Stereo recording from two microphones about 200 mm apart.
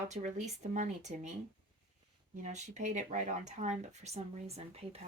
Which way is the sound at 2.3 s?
35° right (ahead or behind).